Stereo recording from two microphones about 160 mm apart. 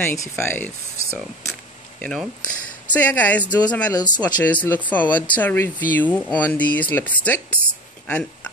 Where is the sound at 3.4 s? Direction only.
25° left (ahead or behind).